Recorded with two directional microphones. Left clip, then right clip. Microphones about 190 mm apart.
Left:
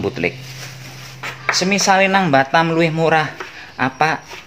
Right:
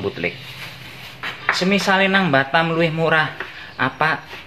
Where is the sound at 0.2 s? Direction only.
45° left (ahead or behind).